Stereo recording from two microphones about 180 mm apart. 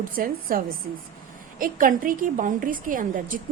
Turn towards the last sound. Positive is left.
turn(degrees=-50)  # may be behind; listen again after turning